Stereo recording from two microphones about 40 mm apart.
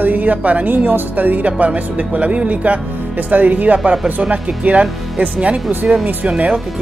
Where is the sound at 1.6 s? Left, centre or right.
Right.